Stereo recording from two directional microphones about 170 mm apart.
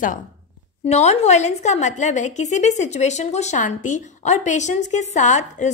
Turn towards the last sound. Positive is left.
turn(degrees=45)  # may be behind; listen again after turning